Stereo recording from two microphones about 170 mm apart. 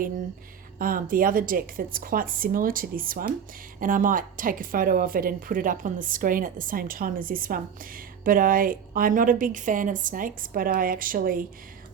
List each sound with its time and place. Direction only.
0.8 s speech: 55° right (ahead or behind)